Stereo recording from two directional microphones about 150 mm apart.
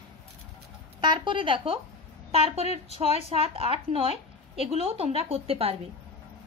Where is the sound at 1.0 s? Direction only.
30° right (ahead or behind).